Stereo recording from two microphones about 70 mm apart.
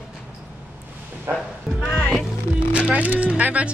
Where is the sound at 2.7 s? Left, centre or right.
Centre.